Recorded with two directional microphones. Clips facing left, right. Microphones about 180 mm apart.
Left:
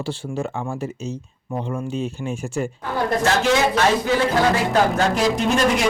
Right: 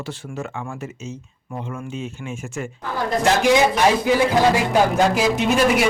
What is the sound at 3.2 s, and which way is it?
Speech, 15° right (ahead or behind).